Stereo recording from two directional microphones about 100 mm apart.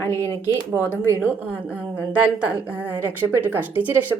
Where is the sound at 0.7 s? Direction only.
25° right (ahead or behind).